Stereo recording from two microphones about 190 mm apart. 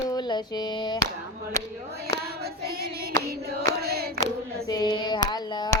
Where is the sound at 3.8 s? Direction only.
55° right (ahead or behind).